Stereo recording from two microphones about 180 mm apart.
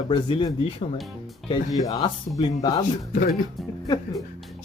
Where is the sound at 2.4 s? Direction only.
20° left (ahead or behind).